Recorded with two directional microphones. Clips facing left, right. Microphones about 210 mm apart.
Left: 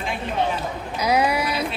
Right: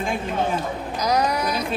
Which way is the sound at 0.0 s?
45° right (ahead or behind).